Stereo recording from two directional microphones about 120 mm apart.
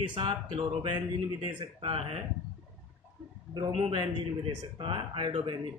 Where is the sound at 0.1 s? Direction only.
40° right (ahead or behind).